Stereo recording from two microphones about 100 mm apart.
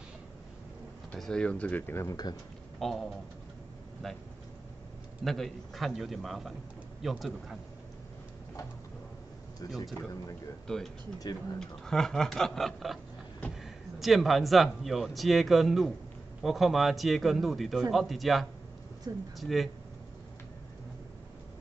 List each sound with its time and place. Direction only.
1.1 s speech: 10° left (ahead or behind)
2.0 s speech: 40° left (ahead or behind)
2.8 s speech: centre (ahead or behind)
5.2 s speech: 5° left (ahead or behind)
10.7 s speech: 5° left (ahead or behind)
19.1 s speech: 45° right (ahead or behind)
19.4 s speech: centre (ahead or behind)